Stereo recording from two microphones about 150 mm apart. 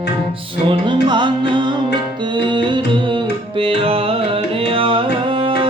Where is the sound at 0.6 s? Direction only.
30° right (ahead or behind).